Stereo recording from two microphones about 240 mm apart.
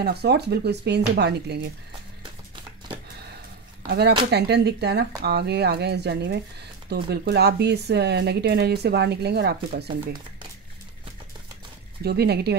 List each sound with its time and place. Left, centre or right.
0.0 s speech: right
4.3 s speech: right
12.0 s speech: right